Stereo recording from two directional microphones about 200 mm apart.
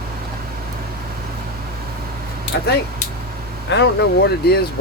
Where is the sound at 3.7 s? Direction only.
60° left (ahead or behind).